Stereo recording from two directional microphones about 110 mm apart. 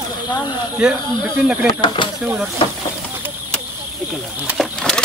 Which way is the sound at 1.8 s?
50° left (ahead or behind).